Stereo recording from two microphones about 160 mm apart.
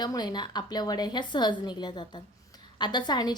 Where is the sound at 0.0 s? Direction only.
25° left (ahead or behind).